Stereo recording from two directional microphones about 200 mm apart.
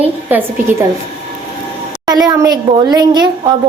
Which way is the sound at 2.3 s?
20° right (ahead or behind).